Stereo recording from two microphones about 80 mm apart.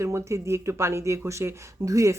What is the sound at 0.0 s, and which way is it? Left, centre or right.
Speech, right.